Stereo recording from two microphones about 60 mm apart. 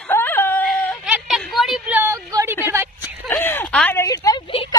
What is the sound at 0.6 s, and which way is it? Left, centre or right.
Whimper, centre.